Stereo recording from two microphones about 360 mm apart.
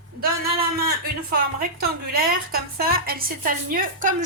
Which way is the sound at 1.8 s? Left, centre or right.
Right.